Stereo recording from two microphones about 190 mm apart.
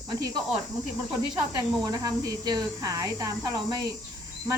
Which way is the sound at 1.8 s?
20° right (ahead or behind).